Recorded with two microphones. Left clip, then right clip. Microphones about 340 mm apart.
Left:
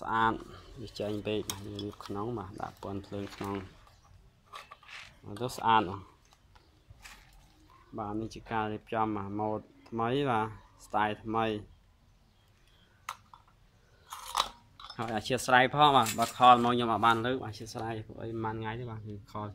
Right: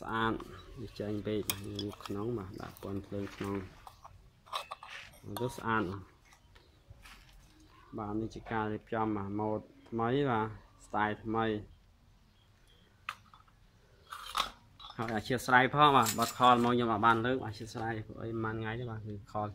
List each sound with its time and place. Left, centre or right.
0.0 s speech: centre
5.4 s speech: centre
7.9 s speech: centre
15.0 s speech: centre